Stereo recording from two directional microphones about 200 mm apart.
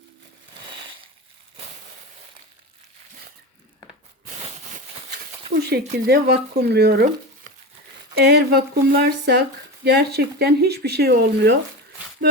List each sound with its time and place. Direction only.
5.5 s speech: 55° right (ahead or behind)
8.1 s speech: 55° right (ahead or behind)